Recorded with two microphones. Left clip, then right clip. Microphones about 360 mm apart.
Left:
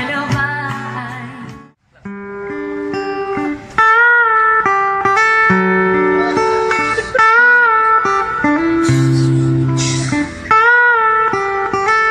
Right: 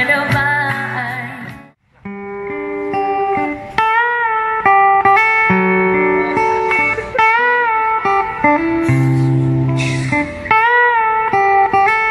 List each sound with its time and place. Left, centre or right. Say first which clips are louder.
0.3 s music: right 4 dB; centre
2.9 s music: right 6 dB; centre